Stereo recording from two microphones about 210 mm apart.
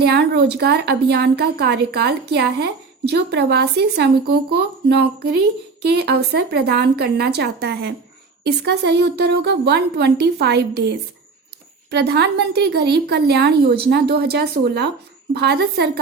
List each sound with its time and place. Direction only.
0.0 s a woman's voice: 50° right (ahead or behind)